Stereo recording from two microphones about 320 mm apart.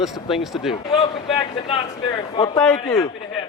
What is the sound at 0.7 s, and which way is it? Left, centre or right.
A man's voice, centre.